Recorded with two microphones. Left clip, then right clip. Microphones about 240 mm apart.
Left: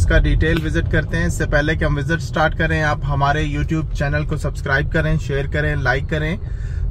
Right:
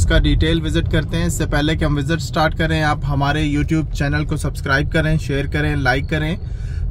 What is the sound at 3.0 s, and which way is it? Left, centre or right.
Speech, right.